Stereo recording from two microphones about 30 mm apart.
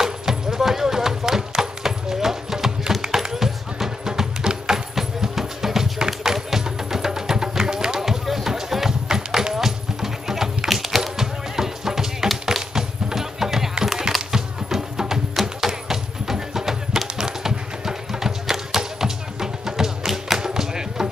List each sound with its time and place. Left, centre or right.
0.0 s music: centre
3.0 s a sound: centre
4.0 s music: right
8.0 s music: centre
11.0 s music: centre
20.3 s a sound: centre